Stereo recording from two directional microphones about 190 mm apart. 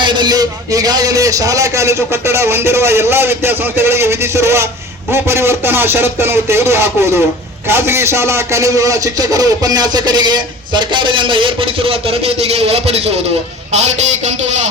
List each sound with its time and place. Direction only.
0.0 s a man's voice: 25° right (ahead or behind)